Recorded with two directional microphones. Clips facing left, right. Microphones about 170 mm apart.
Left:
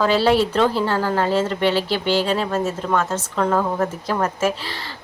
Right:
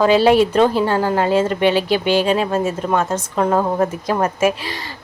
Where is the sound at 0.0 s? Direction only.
15° right (ahead or behind).